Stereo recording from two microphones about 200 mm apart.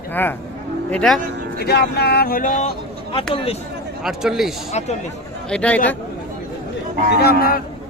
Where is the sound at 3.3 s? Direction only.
30° left (ahead or behind).